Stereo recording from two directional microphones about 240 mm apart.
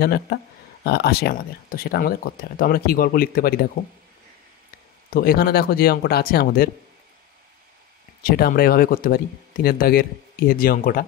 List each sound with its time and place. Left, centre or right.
0.0 s speech: left
5.1 s speech: left
8.2 s speech: left